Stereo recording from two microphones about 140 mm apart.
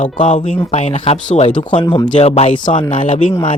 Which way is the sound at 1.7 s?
40° left (ahead or behind).